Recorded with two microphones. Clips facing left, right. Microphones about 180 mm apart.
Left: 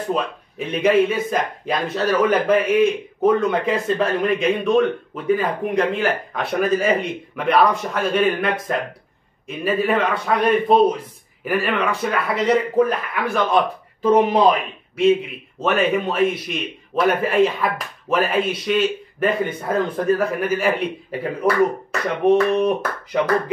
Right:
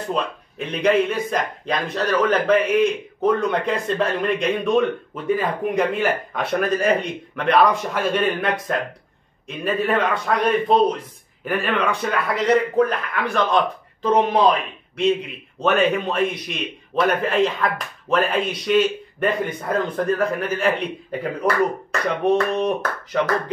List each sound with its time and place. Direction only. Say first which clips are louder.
0.1 s speech: left 1 dB; 5° left (ahead or behind)
15.6 s speech: even; centre (ahead or behind)
22.2 s a sound: left 4 dB; 10° left (ahead or behind)